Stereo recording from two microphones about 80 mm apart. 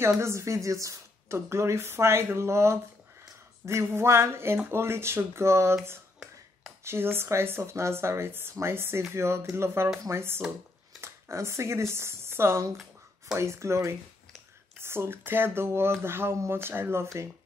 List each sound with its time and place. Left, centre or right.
0.0 s speech: right